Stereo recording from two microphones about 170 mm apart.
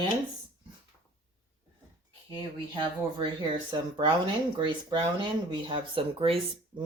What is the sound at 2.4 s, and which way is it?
Speech, 30° right (ahead or behind).